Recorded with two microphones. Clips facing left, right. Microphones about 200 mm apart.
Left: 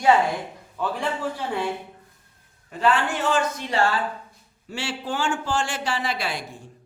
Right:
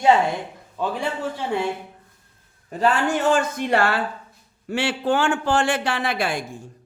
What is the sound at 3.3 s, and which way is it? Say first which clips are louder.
A man's voice: right 4 dB; 55° right (ahead or behind).